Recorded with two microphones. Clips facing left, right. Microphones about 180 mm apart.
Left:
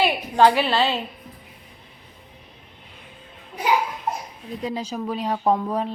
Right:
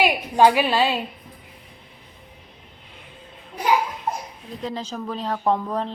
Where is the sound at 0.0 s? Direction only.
15° right (ahead or behind).